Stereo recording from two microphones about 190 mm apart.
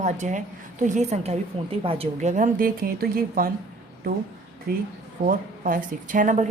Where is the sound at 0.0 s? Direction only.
40° right (ahead or behind).